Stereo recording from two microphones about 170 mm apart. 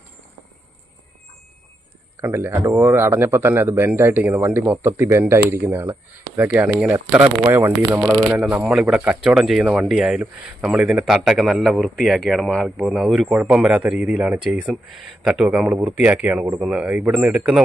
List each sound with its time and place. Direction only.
2.2 s a man's voice: 15° right (ahead or behind)